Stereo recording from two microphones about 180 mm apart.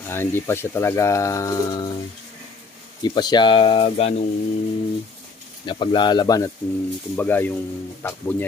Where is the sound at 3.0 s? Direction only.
25° left (ahead or behind).